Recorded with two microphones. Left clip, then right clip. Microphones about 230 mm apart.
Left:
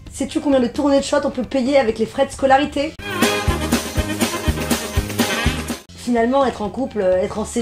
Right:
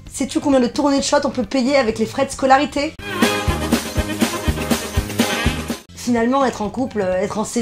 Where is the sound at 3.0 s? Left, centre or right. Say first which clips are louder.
Even; centre.